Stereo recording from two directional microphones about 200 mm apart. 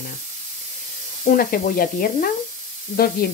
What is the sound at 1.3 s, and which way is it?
Speech, 45° left (ahead or behind).